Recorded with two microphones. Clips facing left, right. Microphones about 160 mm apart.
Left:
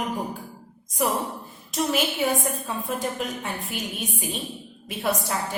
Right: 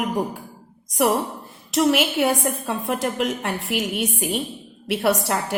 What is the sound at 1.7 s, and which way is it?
A woman's voice, 75° right (ahead or behind).